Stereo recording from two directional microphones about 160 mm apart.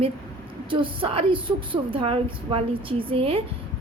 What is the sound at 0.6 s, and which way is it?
A woman's voice, 30° right (ahead or behind).